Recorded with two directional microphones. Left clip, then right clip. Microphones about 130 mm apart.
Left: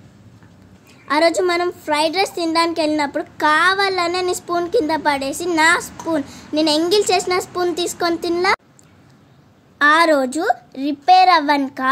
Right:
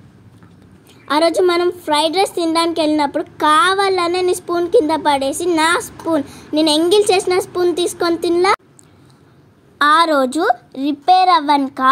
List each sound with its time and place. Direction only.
1.0 s a woman's voice: 20° right (ahead or behind)
9.8 s a woman's voice: 30° right (ahead or behind)